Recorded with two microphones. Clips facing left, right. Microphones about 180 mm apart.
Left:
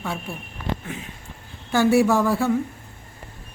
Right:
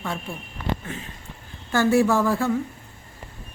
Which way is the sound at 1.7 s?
15° left (ahead or behind).